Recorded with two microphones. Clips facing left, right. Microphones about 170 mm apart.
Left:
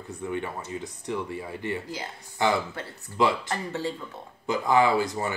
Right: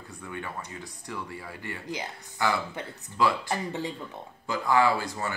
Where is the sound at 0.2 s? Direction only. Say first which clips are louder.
Left 6 dB; 25° left (ahead or behind).